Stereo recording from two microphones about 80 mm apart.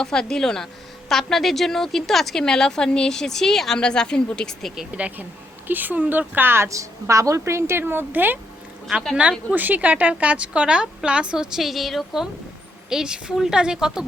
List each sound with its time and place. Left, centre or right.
0.0 s a woman's voice: centre
4.9 s a woman's voice: centre
9.5 s a woman's voice: right